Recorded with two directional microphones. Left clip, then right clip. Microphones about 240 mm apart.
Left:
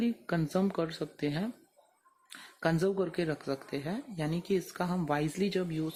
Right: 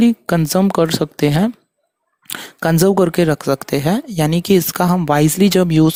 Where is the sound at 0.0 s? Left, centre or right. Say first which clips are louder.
Right 17 dB; right.